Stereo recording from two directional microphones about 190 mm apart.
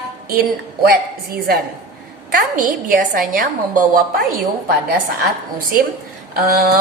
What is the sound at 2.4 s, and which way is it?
A woman's voice, 45° right (ahead or behind).